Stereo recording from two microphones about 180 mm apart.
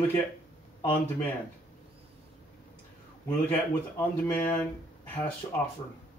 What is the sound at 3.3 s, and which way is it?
Speech, 10° left (ahead or behind).